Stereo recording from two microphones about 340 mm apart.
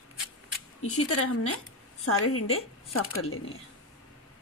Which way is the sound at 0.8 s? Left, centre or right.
Left.